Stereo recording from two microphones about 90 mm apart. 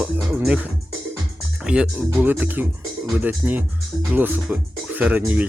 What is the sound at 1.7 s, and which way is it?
Speech, 15° right (ahead or behind).